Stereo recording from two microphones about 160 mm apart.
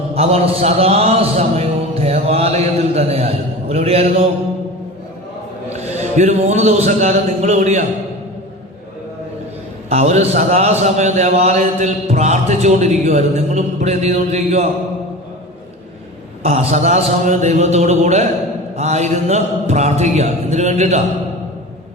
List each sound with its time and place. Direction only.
0.1 s a man's voice: 40° right (ahead or behind)
5.7 s a man's voice: 45° right (ahead or behind)
9.9 s a man's voice: 45° right (ahead or behind)
16.4 s a man's voice: 40° right (ahead or behind)